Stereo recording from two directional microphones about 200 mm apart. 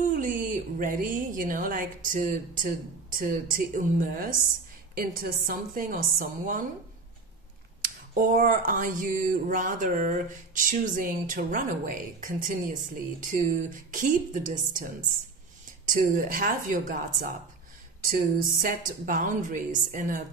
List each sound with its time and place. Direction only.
0.0 s a woman's voice: 40° right (ahead or behind)
7.8 s a woman's voice: 40° right (ahead or behind)
15.9 s a woman's voice: 45° right (ahead or behind)